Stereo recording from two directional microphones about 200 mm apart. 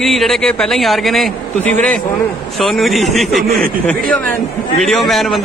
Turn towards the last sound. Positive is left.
turn(degrees=0)  # may be behind; listen again after turning